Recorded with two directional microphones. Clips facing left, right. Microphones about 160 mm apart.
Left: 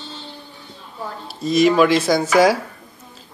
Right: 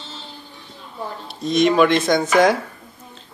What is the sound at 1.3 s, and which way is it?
Speech, 5° left (ahead or behind).